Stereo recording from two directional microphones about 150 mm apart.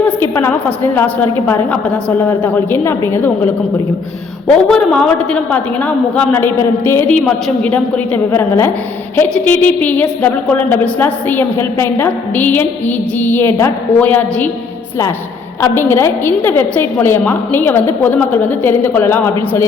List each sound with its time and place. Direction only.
0.0 s a woman's voice: 15° left (ahead or behind)
4.4 s a woman's voice: 5° left (ahead or behind)
15.6 s a woman's voice: 15° left (ahead or behind)